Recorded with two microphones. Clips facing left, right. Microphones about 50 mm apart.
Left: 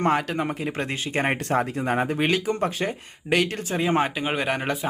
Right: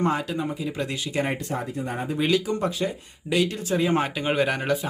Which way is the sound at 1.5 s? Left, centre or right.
Left.